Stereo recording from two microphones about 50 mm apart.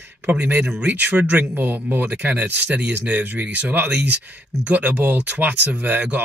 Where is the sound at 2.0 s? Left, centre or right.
Right.